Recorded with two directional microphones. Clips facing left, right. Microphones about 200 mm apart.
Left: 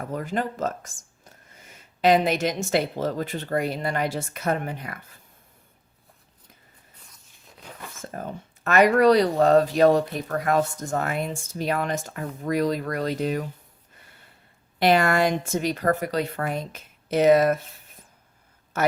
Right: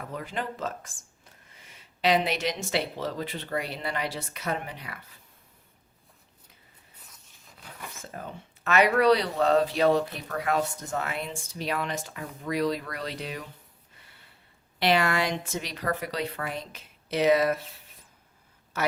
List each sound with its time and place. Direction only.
0.0 s speech: 45° left (ahead or behind)
8.1 s speech: 45° left (ahead or behind)
14.8 s speech: 45° left (ahead or behind)